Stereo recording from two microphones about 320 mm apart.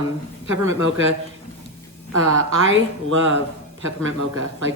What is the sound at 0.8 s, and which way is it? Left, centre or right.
Speech, right.